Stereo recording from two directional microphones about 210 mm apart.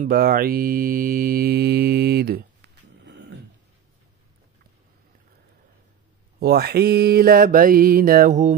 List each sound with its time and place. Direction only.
0.0 s mantra: 45° right (ahead or behind)
6.4 s mantra: 50° right (ahead or behind)